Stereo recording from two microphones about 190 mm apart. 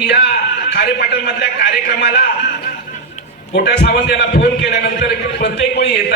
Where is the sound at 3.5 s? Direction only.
65° left (ahead or behind).